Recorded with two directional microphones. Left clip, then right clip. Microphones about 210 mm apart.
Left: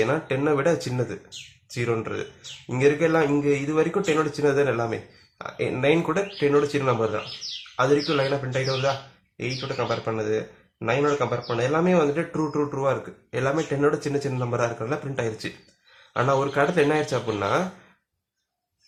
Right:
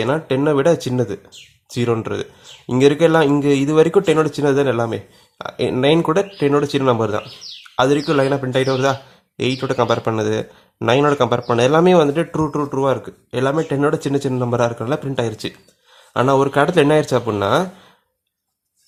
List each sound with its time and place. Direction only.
0.0 s speech: 40° right (ahead or behind)
9.4 s speech: 50° right (ahead or behind)